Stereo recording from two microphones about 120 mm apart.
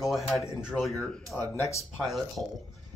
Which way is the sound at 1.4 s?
20° left (ahead or behind).